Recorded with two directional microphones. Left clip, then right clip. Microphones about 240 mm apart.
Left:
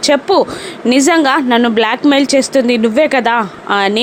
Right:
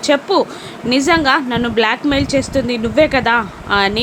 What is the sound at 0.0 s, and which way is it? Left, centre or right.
A woman's voice, centre.